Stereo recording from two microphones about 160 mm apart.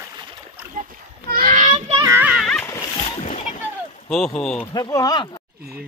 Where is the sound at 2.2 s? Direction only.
Centre (ahead or behind).